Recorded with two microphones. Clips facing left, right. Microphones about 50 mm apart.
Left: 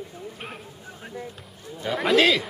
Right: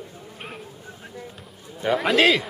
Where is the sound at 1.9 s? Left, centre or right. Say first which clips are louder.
Right 1 dB; centre.